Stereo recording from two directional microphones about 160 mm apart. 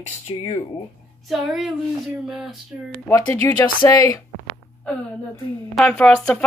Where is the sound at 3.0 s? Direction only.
20° left (ahead or behind).